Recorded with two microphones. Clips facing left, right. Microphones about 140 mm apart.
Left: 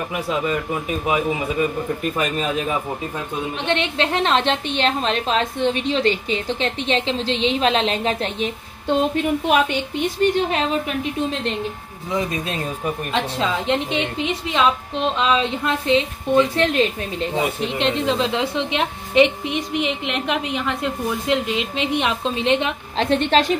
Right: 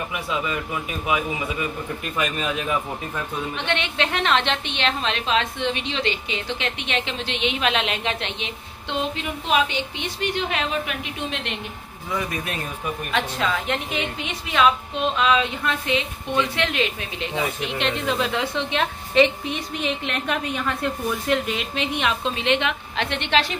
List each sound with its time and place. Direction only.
0.1 s a woman's voice: 40° left (ahead or behind)
12.1 s a woman's voice: 20° left (ahead or behind)
16.3 s a woman's voice: 40° left (ahead or behind)
17.4 s a woman's voice: 30° left (ahead or behind)